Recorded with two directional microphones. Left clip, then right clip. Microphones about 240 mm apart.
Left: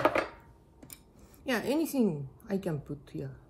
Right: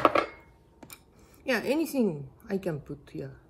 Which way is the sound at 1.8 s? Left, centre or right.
Centre.